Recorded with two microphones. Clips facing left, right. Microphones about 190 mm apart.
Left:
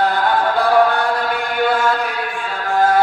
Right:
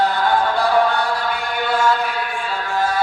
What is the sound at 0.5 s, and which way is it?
Music, 55° left (ahead or behind).